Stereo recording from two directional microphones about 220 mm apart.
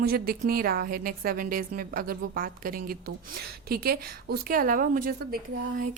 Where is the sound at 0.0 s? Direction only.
45° right (ahead or behind).